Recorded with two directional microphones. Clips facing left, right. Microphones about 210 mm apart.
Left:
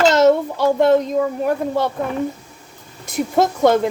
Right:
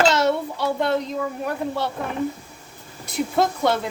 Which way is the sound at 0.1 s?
45° left (ahead or behind).